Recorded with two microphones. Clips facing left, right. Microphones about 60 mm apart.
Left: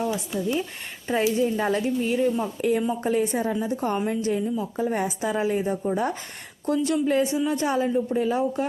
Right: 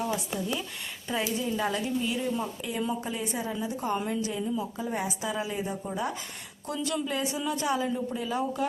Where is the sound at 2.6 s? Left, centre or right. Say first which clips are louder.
Left 8 dB; left.